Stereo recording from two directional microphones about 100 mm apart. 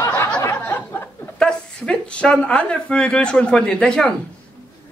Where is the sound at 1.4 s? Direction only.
10° left (ahead or behind).